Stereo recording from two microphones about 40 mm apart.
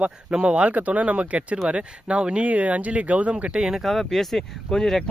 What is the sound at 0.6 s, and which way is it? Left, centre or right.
Speech, right.